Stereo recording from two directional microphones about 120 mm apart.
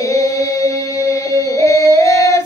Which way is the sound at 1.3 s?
30° right (ahead or behind).